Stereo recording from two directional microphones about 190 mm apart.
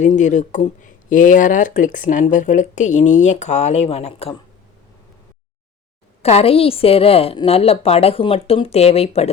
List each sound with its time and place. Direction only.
0.0 s speech: 40° left (ahead or behind)
6.2 s speech: 30° left (ahead or behind)